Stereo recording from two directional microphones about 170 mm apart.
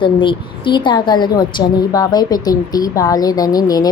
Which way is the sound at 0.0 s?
30° left (ahead or behind).